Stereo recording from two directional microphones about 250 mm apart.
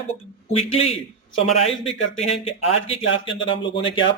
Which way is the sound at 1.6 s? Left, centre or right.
Left.